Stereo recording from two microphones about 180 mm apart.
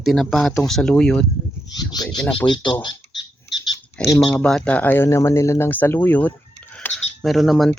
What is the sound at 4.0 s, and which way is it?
Speech, 25° left (ahead or behind).